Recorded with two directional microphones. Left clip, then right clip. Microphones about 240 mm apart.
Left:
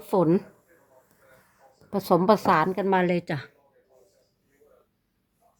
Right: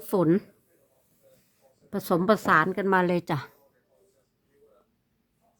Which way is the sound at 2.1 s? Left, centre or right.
Centre.